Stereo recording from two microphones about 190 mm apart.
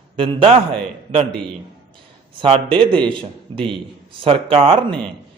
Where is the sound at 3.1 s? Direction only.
25° right (ahead or behind).